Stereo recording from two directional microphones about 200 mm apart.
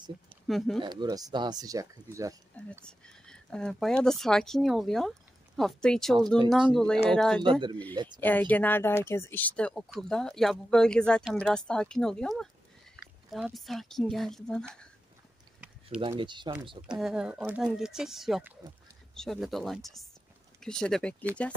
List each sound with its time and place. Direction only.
0.5 s speech: centre (ahead or behind)
0.7 s speech: 20° right (ahead or behind)
2.8 s speech: 5° left (ahead or behind)
7.9 s speech: 20° right (ahead or behind)
8.2 s speech: 10° left (ahead or behind)
16.0 s speech: 25° right (ahead or behind)
17.0 s speech: 5° right (ahead or behind)